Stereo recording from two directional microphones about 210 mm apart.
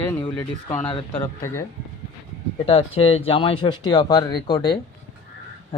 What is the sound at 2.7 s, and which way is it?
Speech, 25° left (ahead or behind).